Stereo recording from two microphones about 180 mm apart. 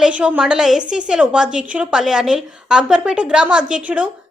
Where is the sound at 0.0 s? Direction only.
5° right (ahead or behind).